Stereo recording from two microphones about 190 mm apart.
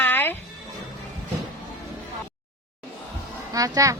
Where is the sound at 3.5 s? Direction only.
15° right (ahead or behind).